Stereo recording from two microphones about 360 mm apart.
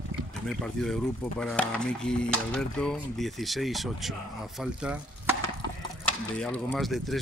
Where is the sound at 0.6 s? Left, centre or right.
Centre.